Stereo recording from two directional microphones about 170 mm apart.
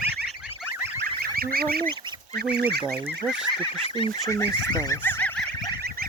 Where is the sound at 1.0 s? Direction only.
60° right (ahead or behind).